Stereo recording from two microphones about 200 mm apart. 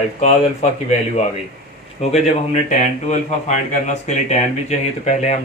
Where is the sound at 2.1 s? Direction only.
35° left (ahead or behind).